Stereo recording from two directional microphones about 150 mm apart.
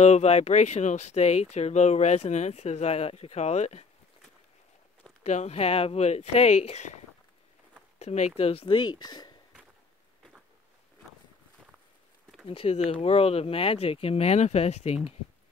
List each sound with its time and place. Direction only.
0.0 s speech: 45° left (ahead or behind)
5.2 s speech: 45° left (ahead or behind)
8.0 s speech: 50° left (ahead or behind); by 9.3 s 25° left (ahead or behind)
12.4 s speech: 40° left (ahead or behind)